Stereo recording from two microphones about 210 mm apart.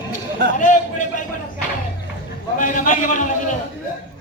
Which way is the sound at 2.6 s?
40° left (ahead or behind).